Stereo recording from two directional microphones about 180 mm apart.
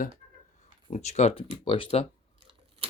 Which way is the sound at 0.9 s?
40° left (ahead or behind).